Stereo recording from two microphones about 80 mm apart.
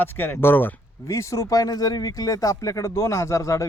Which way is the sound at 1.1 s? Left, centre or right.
Left.